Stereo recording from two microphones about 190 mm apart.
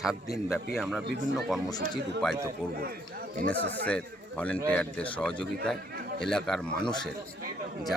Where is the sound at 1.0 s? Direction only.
65° right (ahead or behind).